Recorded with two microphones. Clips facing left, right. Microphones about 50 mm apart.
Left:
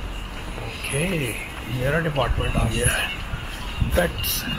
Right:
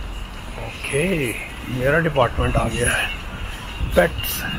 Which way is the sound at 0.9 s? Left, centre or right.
Centre.